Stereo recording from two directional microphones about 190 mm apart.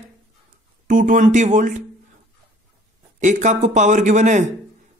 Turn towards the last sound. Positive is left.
turn(degrees=-40)  # may be behind; listen again after turning